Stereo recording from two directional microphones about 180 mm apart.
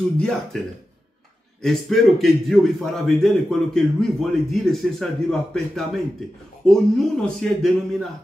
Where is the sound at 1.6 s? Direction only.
Centre (ahead or behind).